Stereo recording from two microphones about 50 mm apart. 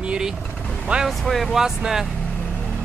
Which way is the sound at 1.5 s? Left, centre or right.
Centre.